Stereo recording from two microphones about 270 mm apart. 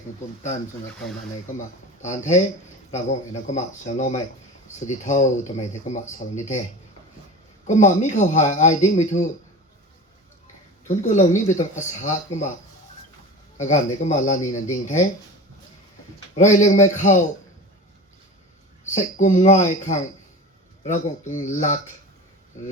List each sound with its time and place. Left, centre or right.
1.5 s speech: left
7.7 s speech: left
10.8 s speech: left
13.6 s speech: left
16.3 s speech: left
18.9 s speech: left